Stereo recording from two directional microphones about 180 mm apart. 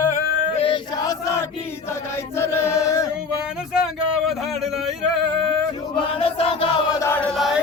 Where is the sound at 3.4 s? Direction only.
5° right (ahead or behind).